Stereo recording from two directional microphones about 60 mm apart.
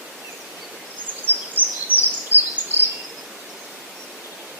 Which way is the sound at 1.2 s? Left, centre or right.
Right.